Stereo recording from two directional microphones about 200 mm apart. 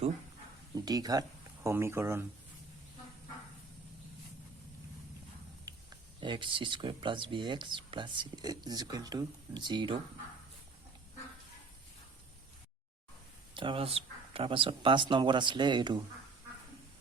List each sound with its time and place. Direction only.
0.9 s speech: 20° right (ahead or behind)
5.7 s a sound: 20° right (ahead or behind)
6.1 s speech: 25° right (ahead or behind)
13.5 s speech: 25° right (ahead or behind)